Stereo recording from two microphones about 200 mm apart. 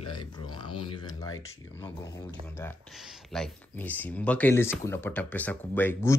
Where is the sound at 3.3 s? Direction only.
5° left (ahead or behind).